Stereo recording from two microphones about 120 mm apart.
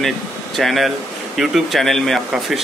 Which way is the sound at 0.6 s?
Centre (ahead or behind).